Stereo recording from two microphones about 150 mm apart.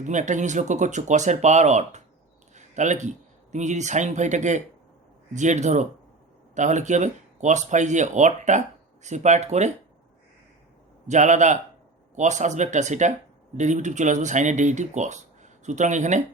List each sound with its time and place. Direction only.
0.0 s speech: 55° right (ahead or behind)
11.1 s a man's voice: 55° right (ahead or behind)